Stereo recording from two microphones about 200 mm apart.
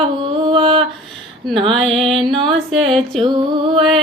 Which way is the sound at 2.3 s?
25° right (ahead or behind).